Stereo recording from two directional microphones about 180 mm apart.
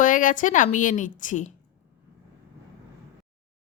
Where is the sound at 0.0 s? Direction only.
45° left (ahead or behind).